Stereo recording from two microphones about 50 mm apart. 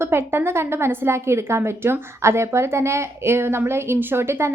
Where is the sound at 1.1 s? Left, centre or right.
Right.